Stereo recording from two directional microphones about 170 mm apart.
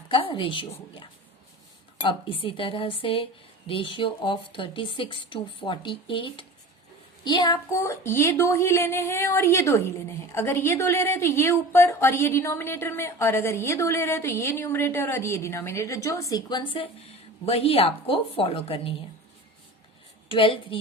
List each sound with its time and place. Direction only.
0.1 s a woman's voice: 30° left (ahead or behind)
20.2 s a woman's voice: 30° left (ahead or behind)